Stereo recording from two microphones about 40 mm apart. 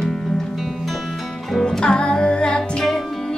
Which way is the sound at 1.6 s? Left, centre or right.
Centre.